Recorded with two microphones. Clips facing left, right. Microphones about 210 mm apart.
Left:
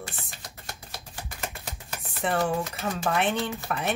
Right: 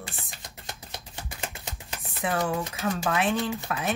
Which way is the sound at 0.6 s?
20° right (ahead or behind).